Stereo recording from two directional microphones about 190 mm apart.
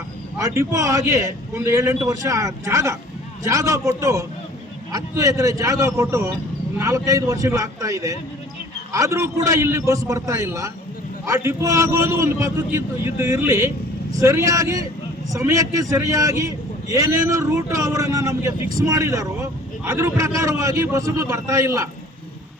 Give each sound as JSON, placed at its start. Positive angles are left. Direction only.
{"t": 0.3, "sound": "a man's voice", "side_deg": -15}